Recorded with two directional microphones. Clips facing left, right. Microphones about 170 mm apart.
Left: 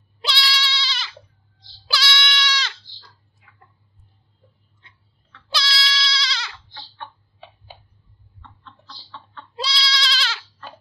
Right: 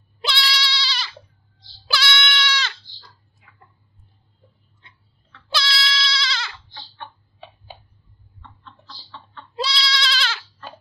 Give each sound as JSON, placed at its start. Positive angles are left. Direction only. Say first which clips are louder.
{"t": 0.2, "sound": "bleat", "louder": "right 1 dB", "side_deg": -50}
{"t": 0.6, "sound": "goat", "louder": "right 1 dB", "side_deg": -35}
{"t": 1.9, "sound": "goat", "louder": "right 2 dB", "side_deg": -55}
{"t": 5.5, "sound": "goat", "louder": "right 1 dB", "side_deg": -50}
{"t": 9.6, "sound": "goat", "louder": "right 2 dB", "side_deg": -50}